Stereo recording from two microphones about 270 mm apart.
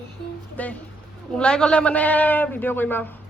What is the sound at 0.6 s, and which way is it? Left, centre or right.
A man's voice, centre.